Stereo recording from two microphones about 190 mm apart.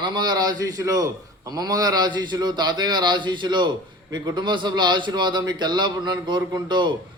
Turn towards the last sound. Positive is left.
turn(degrees=-25)  # may be behind; listen again after turning